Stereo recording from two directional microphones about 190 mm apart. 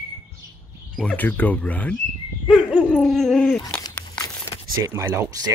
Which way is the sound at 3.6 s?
20° left (ahead or behind).